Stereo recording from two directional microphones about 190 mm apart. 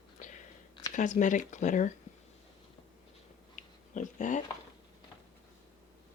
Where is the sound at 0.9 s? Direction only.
40° left (ahead or behind).